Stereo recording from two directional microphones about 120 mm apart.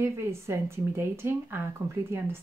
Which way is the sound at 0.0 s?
20° right (ahead or behind).